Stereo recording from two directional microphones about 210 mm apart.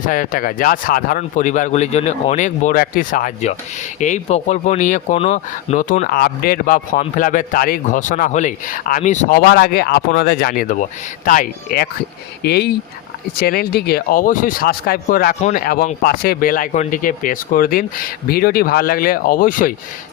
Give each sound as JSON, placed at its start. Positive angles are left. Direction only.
{"t": 0.0, "sound": "speech", "side_deg": 40}